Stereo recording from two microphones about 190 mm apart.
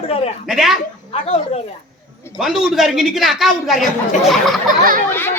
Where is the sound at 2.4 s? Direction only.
Centre (ahead or behind).